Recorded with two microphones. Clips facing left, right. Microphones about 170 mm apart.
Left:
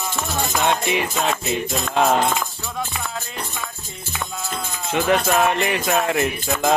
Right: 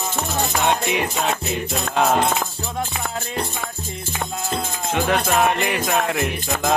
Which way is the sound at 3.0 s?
50° right (ahead or behind).